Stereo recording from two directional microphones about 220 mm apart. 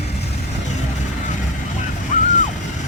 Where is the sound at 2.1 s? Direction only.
35° left (ahead or behind).